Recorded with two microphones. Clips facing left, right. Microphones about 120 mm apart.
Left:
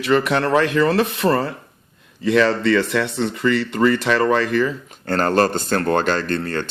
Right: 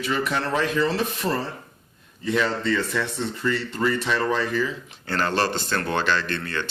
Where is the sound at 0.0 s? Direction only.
65° left (ahead or behind).